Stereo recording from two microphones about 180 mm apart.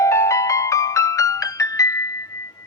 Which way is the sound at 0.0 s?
15° left (ahead or behind).